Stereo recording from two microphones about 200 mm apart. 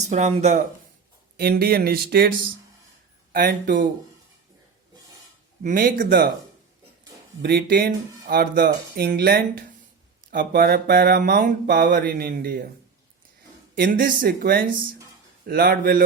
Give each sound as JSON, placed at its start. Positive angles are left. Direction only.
{"t": 0.0, "sound": "speech", "side_deg": -35}
{"t": 1.4, "sound": "speech", "side_deg": -50}
{"t": 3.3, "sound": "speech", "side_deg": -45}
{"t": 5.6, "sound": "speech", "side_deg": -45}
{"t": 7.4, "sound": "speech", "side_deg": -55}
{"t": 13.7, "sound": "speech", "side_deg": -45}